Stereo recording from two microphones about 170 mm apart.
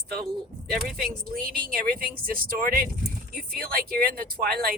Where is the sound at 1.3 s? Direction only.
60° right (ahead or behind).